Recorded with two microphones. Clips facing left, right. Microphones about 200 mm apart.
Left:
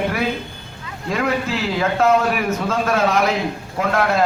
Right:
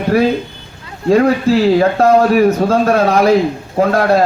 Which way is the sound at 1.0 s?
35° right (ahead or behind).